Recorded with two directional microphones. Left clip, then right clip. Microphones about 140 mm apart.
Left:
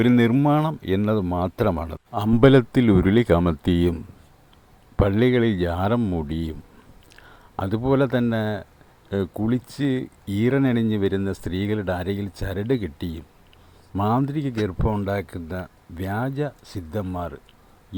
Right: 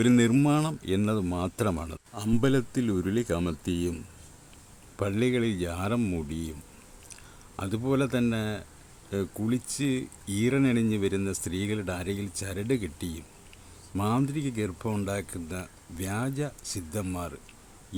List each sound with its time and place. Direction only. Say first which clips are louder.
0.8 s speech: left 6 dB; 30° left (ahead or behind)
2.4 s speech: left 12 dB; 55° left (ahead or behind)
3.3 s speech: left 10 dB; 35° left (ahead or behind)
3.6 s speech: left 9 dB; 55° left (ahead or behind)
4.9 s speech: left 8 dB; 45° left (ahead or behind)
6.0 s speech: left 5 dB; 30° left (ahead or behind)
6.2 s speech: left 7 dB; 40° left (ahead or behind)
7.5 s speech: left 7 dB; 40° left (ahead or behind)